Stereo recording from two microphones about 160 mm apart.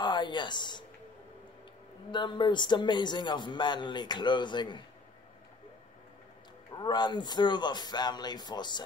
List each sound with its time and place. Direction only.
0.0 s a sound: 30° left (ahead or behind)
2.0 s a man's voice: 30° left (ahead or behind)
6.8 s a man's voice: 25° left (ahead or behind)